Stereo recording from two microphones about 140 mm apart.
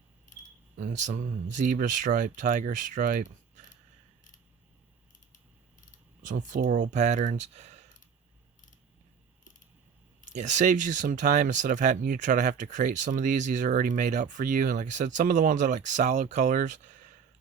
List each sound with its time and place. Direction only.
0.8 s speech: 65° right (ahead or behind)
6.2 s speech: 65° right (ahead or behind)
10.3 s speech: 60° right (ahead or behind)